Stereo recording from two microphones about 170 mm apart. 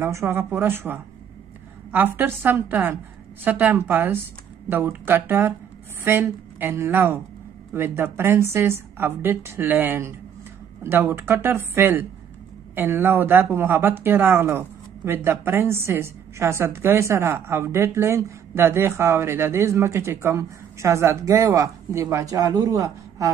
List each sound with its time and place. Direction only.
0.0 s a woman's voice: 15° right (ahead or behind)